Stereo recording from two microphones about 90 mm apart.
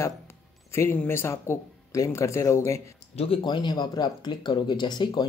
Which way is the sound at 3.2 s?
90° left.